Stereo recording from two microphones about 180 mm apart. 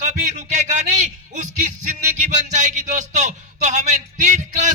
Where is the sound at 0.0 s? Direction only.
40° right (ahead or behind).